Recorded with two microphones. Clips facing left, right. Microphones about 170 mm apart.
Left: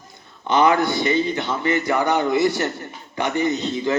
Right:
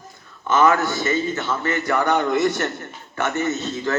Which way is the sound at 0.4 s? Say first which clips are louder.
Left 1 dB; 15° left (ahead or behind).